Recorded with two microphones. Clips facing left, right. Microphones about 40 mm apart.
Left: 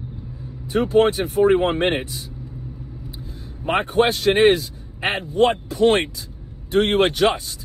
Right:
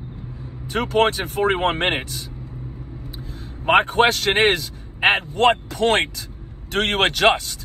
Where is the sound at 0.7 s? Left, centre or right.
Right.